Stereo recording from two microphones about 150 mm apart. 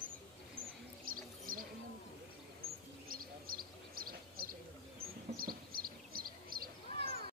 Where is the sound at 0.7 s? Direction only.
70° right (ahead or behind).